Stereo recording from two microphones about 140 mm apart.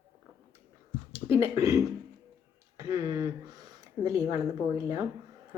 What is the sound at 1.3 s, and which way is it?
Speech, 20° right (ahead or behind).